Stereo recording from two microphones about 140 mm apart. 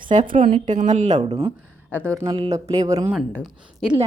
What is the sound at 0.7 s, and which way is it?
Speech, 60° right (ahead or behind).